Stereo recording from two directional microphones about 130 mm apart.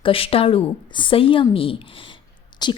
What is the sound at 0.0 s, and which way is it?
A woman's voice, 45° left (ahead or behind).